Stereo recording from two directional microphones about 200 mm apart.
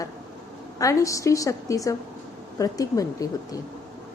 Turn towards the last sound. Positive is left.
turn(degrees=15)  # may be behind; listen again after turning